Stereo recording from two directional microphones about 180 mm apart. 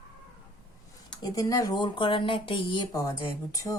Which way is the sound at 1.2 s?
20° left (ahead or behind).